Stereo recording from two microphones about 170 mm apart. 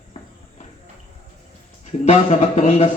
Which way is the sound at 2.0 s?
40° left (ahead or behind).